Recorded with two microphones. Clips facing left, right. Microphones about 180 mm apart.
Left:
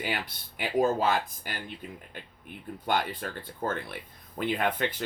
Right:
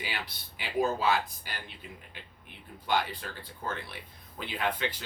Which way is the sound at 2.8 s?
50° left (ahead or behind).